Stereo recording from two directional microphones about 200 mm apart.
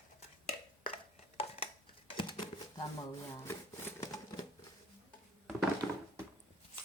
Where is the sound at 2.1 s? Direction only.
25° left (ahead or behind).